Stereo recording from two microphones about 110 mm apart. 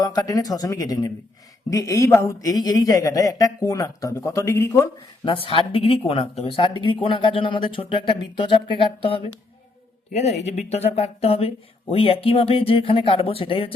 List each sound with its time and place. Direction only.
0.0 s speech: 35° left (ahead or behind)
4.9 s speech: 50° left (ahead or behind)
10.1 s speech: 90° left; by 13.7 s 55° left (ahead or behind)